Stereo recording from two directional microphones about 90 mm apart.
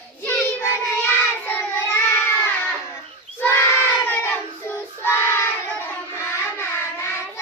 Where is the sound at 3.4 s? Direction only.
25° left (ahead or behind).